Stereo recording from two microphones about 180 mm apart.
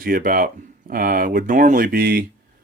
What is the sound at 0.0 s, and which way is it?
Speech, 50° right (ahead or behind).